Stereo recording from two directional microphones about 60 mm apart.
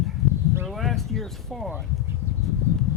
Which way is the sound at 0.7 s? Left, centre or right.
Centre.